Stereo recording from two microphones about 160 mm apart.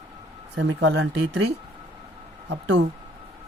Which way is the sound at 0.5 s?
90° right.